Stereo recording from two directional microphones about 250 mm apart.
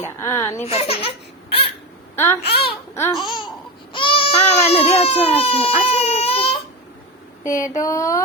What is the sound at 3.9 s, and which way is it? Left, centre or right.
Baby cry, centre.